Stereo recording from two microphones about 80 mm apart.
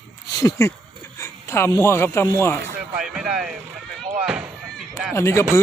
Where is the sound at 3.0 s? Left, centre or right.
Centre.